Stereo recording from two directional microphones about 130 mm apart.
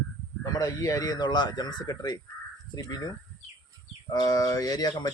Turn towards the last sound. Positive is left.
turn(degrees=30)  # may be behind; listen again after turning